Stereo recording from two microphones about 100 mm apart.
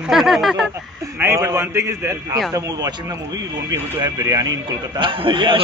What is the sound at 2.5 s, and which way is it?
Speech, 35° right (ahead or behind).